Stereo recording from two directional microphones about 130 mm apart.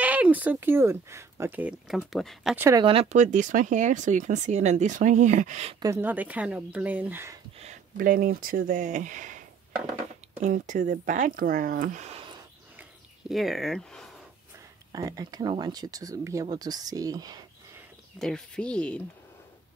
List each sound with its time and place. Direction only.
0.0 s speech: 10° right (ahead or behind)
2.1 s speech: centre (ahead or behind)
2.9 s speech: 50° right (ahead or behind)
3.2 s speech: 70° right (ahead or behind)
5.9 s speech: 15° right (ahead or behind)
7.5 s speech: 60° right (ahead or behind)
10.4 s speech: 85° right
13.3 s speech: centre (ahead or behind)
14.9 s speech: 30° right (ahead or behind)
18.2 s speech: 5° left (ahead or behind)